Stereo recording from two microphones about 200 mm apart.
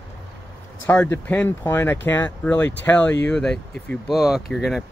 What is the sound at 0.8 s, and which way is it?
Speech, 10° left (ahead or behind).